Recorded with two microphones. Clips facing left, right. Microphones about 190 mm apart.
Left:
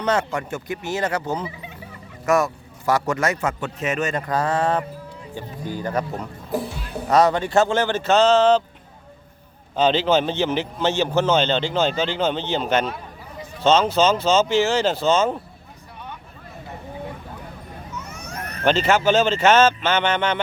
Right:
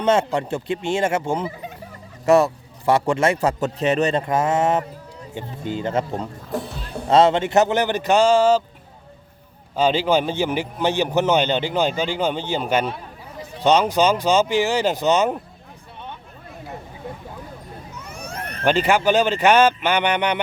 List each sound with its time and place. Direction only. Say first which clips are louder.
0.0 s speech: right 4 dB; 25° right (ahead or behind)
6.5 s speech: left 3 dB; centre (ahead or behind)
7.1 s a man's voice: right 2 dB; 25° right (ahead or behind); by 8.6 s 10° right (ahead or behind)
9.7 s a man's voice: even; 10° right (ahead or behind)
18.3 s vehicle: right 2 dB; 30° right (ahead or behind)
18.6 s a man's voice: even; 10° right (ahead or behind)